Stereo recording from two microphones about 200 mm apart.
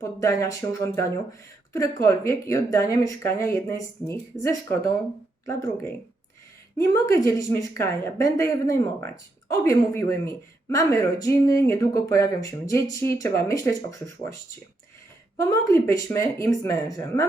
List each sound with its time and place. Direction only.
0.0 s a woman's voice: 15° left (ahead or behind)
6.7 s a woman's voice: 15° left (ahead or behind)
15.4 s a woman's voice: 15° left (ahead or behind)